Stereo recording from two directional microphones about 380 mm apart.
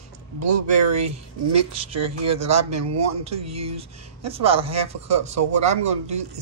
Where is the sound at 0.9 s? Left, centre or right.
Right.